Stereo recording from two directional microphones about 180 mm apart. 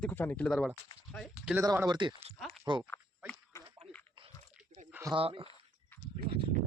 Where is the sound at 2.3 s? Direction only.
Centre (ahead or behind).